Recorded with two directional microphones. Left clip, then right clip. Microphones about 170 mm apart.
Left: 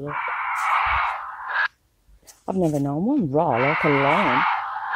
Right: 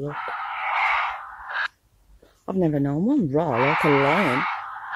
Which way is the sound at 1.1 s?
15° left (ahead or behind).